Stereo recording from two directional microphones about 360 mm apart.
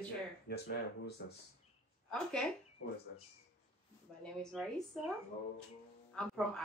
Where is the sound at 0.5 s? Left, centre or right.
Left.